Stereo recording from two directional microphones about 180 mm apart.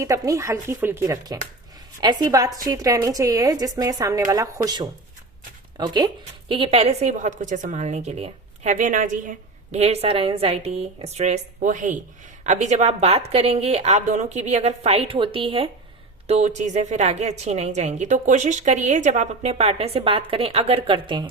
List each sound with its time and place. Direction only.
0.0 s a woman's voice: 15° right (ahead or behind)